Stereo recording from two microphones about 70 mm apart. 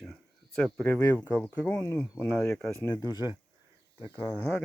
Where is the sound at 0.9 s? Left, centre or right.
Left.